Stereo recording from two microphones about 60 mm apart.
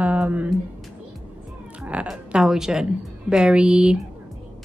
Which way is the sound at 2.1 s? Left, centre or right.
Centre.